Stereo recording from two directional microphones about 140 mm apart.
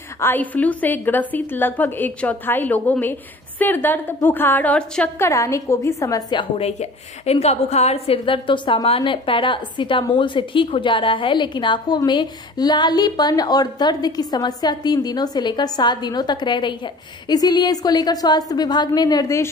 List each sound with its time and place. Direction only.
0.2 s a woman's voice: 15° left (ahead or behind)
5.2 s a woman's voice: 20° left (ahead or behind)
6.6 s a woman's voice: 50° left (ahead or behind); by 19.5 s 20° left (ahead or behind)